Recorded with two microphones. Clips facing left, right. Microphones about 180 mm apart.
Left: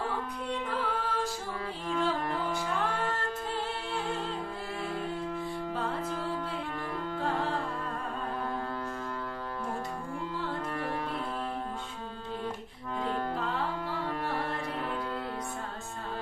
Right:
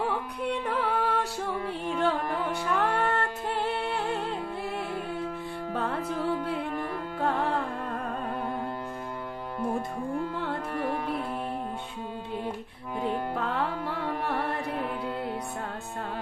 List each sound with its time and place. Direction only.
0.5 s music: 65° right (ahead or behind)
5.7 s music: 65° right (ahead or behind)
7.2 s music: 60° right (ahead or behind)
10.3 s music: 60° right (ahead or behind)
13.3 s music: 60° right (ahead or behind)